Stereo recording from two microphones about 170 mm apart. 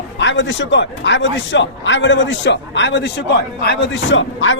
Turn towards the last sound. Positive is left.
turn(degrees=90)